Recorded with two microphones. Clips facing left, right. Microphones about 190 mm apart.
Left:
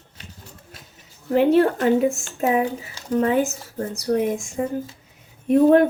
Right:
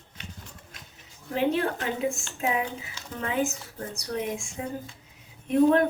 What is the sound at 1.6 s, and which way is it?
Speech, 45° left (ahead or behind).